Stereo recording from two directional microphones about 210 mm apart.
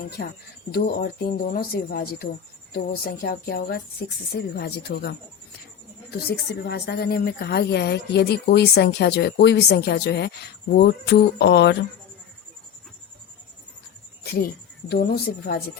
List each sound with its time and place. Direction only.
0.2 s a woman's voice: 55° left (ahead or behind)
6.5 s a woman's voice: 50° left (ahead or behind)
14.3 s a woman's voice: 45° left (ahead or behind)